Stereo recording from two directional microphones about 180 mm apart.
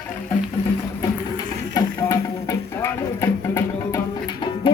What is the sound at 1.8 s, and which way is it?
Music, 20° left (ahead or behind).